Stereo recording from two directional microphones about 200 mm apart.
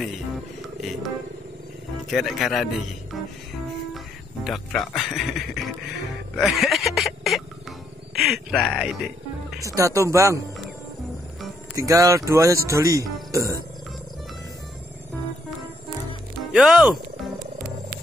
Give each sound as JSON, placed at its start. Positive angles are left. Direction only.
{"t": 2.0, "sound": "speech", "side_deg": 0}
{"t": 4.5, "sound": "speech", "side_deg": 0}
{"t": 6.3, "sound": "a sound", "side_deg": 0}
{"t": 8.1, "sound": "music", "side_deg": 0}
{"t": 9.6, "sound": "speech", "side_deg": -15}
{"t": 11.7, "sound": "speech", "side_deg": -15}
{"t": 16.5, "sound": "speech", "side_deg": 0}